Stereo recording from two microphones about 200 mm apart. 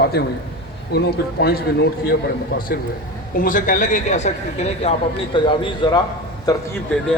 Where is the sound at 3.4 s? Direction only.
40° left (ahead or behind).